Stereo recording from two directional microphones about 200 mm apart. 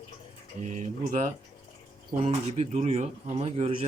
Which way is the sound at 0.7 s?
40° right (ahead or behind).